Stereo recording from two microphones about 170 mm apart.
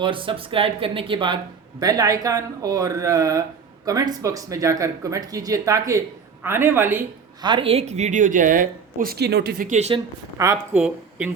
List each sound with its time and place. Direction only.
0.0 s speech: 30° right (ahead or behind); by 7.0 s 15° right (ahead or behind)
7.4 s speech: 30° right (ahead or behind); by 9.6 s 65° right (ahead or behind)
9.6 s speech: 40° right (ahead or behind)
10.3 s a woman's voice: 20° right (ahead or behind)
10.8 s speech: 5° right (ahead or behind)